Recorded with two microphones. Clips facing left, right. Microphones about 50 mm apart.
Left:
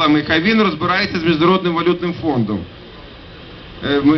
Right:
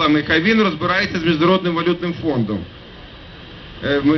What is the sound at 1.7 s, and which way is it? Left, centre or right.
Speech, centre.